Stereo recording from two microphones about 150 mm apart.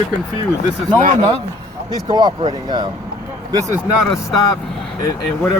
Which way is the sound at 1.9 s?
25° right (ahead or behind).